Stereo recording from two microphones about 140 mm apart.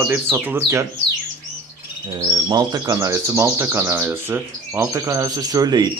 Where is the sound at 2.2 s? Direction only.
30° right (ahead or behind).